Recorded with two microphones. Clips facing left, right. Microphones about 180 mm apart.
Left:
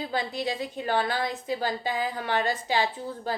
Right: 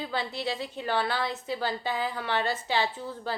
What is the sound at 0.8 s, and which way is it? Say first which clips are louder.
Speech: left 2 dB; 45° left (ahead or behind).